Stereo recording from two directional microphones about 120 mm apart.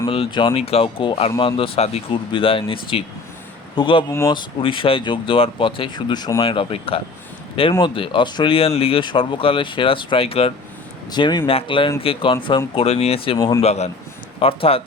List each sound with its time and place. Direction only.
0.1 s speech: 45° left (ahead or behind)
2.3 s speech: 45° left (ahead or behind)
6.4 s speech: 50° left (ahead or behind)
11.1 s speech: 40° left (ahead or behind)
13.6 s a man's voice: 60° left (ahead or behind)
14.3 s speech: 50° left (ahead or behind)